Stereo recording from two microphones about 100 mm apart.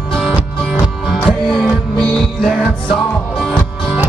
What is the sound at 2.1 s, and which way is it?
Music, 5° left (ahead or behind).